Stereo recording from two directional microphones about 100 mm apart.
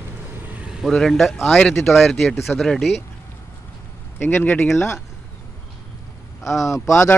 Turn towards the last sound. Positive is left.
turn(degrees=30)  # may be behind; listen again after turning